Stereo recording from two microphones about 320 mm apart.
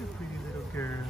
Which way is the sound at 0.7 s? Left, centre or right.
Centre.